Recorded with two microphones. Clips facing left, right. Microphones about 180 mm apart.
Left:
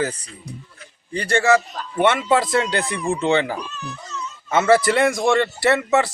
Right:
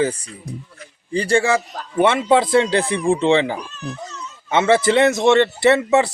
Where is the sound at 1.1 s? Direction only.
30° right (ahead or behind).